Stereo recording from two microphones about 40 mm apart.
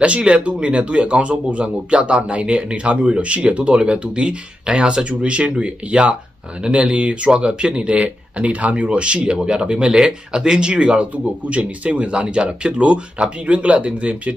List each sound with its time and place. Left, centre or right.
0.0 s speech: right
9.9 s speech: centre; by 14.3 s right